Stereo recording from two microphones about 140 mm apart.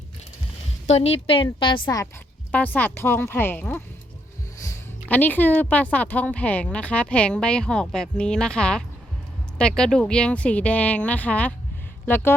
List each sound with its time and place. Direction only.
0.9 s a woman's voice: 50° left (ahead or behind)
2.5 s a woman's voice: 10° left (ahead or behind)